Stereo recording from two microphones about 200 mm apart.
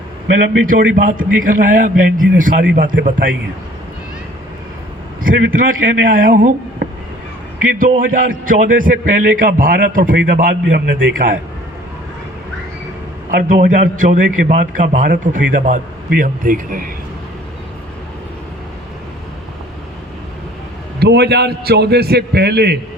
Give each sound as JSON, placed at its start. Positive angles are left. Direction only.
{"t": 0.6, "sound": "a man's voice", "side_deg": -45}
{"t": 5.2, "sound": "a man's voice", "side_deg": -45}
{"t": 13.3, "sound": "a man's voice", "side_deg": -40}
{"t": 21.0, "sound": "a man's voice", "side_deg": -55}